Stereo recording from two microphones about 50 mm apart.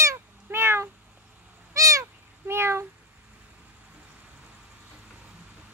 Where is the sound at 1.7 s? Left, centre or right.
Right.